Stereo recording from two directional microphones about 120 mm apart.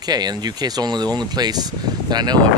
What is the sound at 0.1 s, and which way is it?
Speech, 35° right (ahead or behind).